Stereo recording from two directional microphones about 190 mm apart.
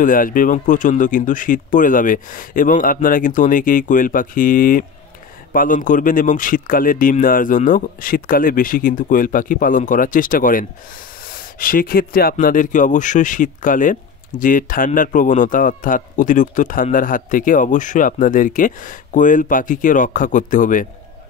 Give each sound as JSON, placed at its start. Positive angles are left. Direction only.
{"t": 0.0, "sound": "a man's voice", "side_deg": 45}